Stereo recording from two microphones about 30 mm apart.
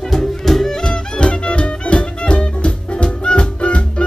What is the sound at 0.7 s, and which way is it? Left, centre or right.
Music, left.